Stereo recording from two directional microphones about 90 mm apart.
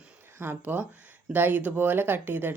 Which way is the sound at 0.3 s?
20° right (ahead or behind).